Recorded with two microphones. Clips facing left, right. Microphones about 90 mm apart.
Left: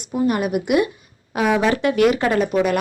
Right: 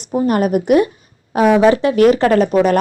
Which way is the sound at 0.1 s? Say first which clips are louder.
Right 5 dB; 45° right (ahead or behind).